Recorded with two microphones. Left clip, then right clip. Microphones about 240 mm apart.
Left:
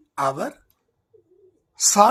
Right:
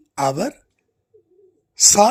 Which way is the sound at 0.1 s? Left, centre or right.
Right.